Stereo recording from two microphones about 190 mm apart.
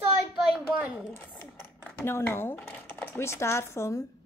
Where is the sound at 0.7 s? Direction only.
10° right (ahead or behind).